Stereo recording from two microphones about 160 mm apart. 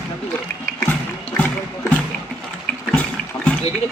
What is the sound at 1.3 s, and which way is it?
Rowboat, 10° left (ahead or behind).